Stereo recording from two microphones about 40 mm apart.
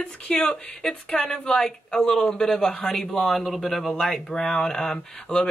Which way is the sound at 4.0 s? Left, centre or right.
Centre.